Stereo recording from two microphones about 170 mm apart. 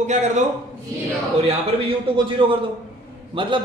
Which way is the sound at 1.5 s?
30° right (ahead or behind).